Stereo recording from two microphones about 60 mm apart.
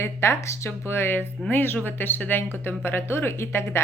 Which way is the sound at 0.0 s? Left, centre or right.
Left.